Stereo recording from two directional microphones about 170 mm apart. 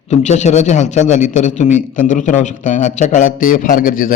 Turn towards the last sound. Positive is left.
turn(degrees=55)  # may be behind; listen again after turning